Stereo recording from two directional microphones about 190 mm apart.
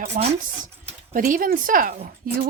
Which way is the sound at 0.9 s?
45° right (ahead or behind).